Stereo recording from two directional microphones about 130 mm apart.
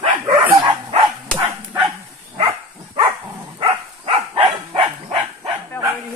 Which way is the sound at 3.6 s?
40° right (ahead or behind).